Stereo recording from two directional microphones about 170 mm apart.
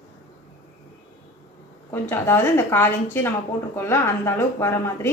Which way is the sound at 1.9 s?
15° left (ahead or behind).